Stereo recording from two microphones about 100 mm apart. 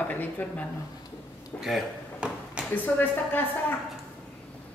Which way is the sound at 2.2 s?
10° right (ahead or behind).